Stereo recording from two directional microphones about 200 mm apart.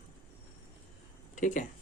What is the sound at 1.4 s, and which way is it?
Speech, 40° left (ahead or behind).